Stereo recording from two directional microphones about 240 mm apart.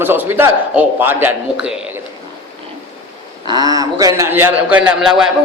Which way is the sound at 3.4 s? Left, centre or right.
Centre.